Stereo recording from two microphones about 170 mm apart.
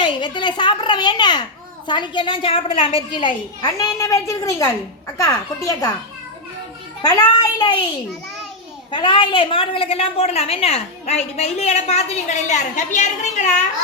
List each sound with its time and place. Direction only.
0.0 s a woman's voice: 25° left (ahead or behind)
7.0 s a woman's voice: 25° left (ahead or behind)
8.9 s a woman's voice: 30° left (ahead or behind); by 13.6 s 45° left (ahead or behind)